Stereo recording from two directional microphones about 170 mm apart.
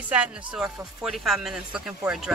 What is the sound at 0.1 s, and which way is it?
Speech, 5° right (ahead or behind).